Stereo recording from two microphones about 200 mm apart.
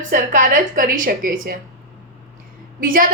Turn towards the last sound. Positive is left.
turn(degrees=-45)  # may be behind; listen again after turning